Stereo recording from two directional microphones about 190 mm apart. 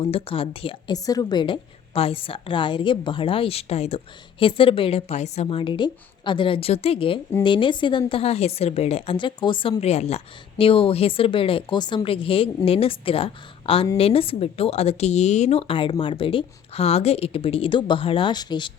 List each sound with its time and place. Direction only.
0.0 s a woman's voice: 30° left (ahead or behind)